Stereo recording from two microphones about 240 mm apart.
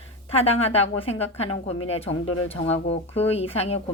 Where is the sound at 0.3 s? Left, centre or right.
Left.